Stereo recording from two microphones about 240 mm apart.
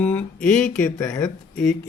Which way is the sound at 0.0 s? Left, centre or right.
Centre.